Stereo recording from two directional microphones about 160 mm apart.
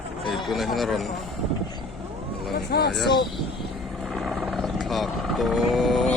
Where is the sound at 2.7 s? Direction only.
90° left.